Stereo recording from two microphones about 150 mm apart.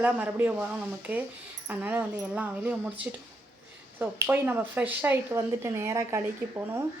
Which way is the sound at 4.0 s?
15° right (ahead or behind).